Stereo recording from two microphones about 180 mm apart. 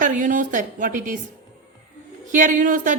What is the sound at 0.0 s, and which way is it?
Speech, 45° right (ahead or behind).